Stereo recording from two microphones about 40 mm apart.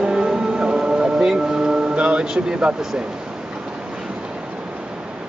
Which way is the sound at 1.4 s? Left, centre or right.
Centre.